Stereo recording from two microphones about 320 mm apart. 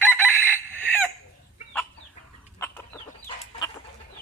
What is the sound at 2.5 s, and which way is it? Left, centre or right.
Chicken, centre.